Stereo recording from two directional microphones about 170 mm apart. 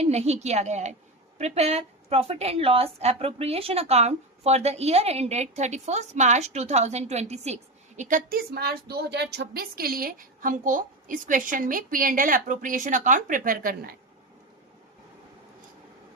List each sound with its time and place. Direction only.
0.0 s a woman's voice: 40° right (ahead or behind); by 13.9 s 55° right (ahead or behind)